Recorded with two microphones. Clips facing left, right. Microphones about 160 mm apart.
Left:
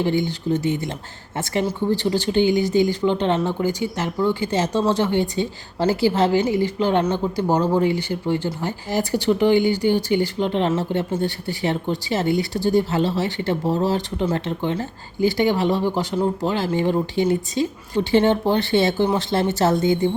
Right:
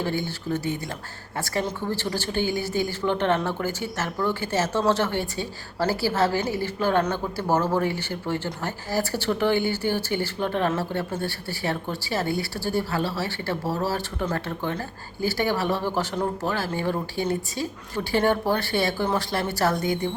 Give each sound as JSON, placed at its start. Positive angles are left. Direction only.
{"t": 0.0, "sound": "speech", "side_deg": 20}